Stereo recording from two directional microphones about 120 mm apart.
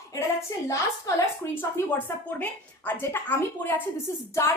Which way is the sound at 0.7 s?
25° left (ahead or behind).